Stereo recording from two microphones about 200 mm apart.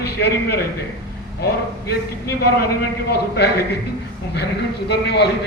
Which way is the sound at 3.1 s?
55° left (ahead or behind).